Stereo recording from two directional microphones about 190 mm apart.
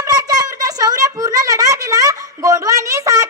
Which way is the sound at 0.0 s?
20° right (ahead or behind).